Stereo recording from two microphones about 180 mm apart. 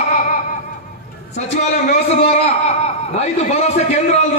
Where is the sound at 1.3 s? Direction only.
40° left (ahead or behind).